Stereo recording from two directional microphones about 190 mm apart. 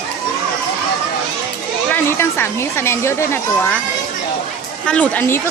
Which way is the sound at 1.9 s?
15° left (ahead or behind).